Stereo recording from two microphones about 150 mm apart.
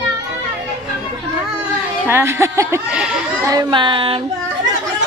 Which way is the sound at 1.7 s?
5° right (ahead or behind).